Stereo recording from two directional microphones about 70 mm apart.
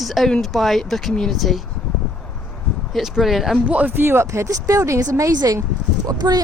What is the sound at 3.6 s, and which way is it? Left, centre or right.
Speech, centre.